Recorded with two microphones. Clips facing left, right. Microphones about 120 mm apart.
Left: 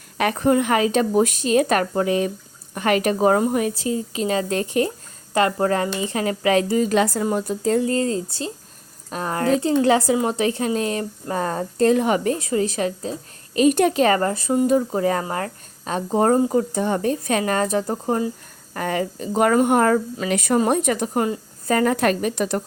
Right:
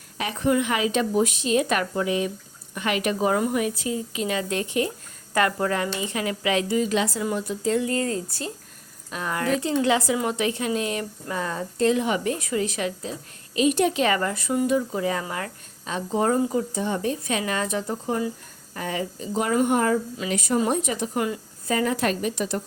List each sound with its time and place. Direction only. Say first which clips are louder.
0.2 s speech: left 8 dB; 55° left (ahead or behind)
0.4 s a woman's voice: left 3 dB; 45° left (ahead or behind)
5.3 s speech: left 4 dB; 25° left (ahead or behind)
9.0 s speech: left 4 dB; 40° left (ahead or behind)
14.7 s a woman's voice: left 5 dB; 45° left (ahead or behind)
18.7 s a woman's voice: left 5 dB; 55° left (ahead or behind)